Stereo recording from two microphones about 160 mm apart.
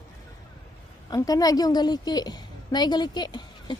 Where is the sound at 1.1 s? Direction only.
25° left (ahead or behind).